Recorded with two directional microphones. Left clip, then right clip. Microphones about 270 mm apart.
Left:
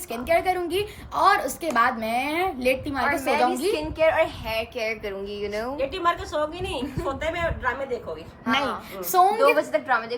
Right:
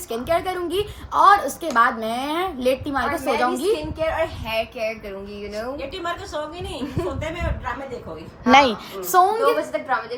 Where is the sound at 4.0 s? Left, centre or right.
Left.